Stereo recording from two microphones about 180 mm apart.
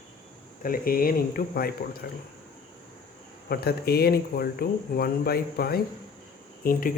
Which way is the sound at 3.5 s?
60° left (ahead or behind).